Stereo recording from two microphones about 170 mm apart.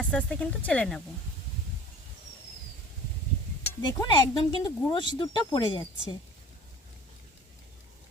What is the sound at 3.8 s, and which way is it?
Speech, 25° left (ahead or behind).